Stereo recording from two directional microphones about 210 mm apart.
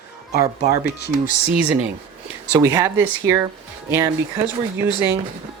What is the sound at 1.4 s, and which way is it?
A woman's voice, 5° right (ahead or behind).